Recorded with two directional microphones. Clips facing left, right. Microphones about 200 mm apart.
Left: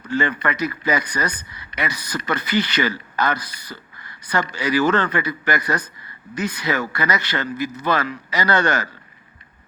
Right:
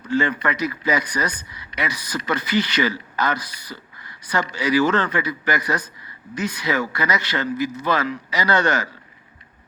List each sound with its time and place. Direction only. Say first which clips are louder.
0.1 s a man's voice: right 1 dB; 55° left (ahead or behind)